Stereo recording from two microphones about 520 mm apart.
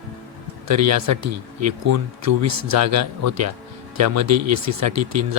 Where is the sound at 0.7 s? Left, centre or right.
Right.